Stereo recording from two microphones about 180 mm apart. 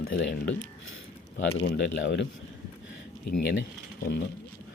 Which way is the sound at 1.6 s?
80° left.